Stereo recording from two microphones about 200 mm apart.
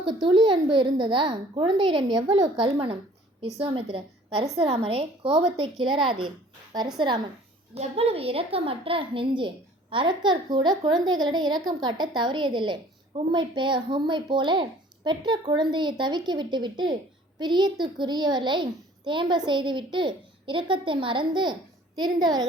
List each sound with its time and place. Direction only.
0.0 s a child's voice: 25° right (ahead or behind)
7.8 s a child's voice: 30° right (ahead or behind)